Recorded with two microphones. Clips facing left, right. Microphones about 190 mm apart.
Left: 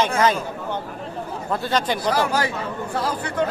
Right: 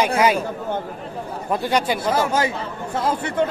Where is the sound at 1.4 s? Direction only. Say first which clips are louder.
Right 2 dB; 15° right (ahead or behind).